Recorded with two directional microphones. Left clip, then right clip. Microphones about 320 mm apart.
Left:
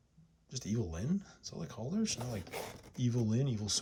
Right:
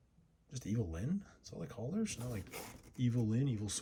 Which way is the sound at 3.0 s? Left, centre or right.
Centre.